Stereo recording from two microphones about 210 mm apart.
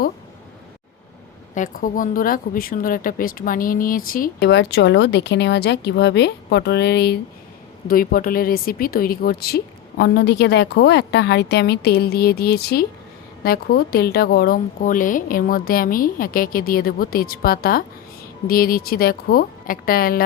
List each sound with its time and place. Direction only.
1.5 s speech: 40° left (ahead or behind)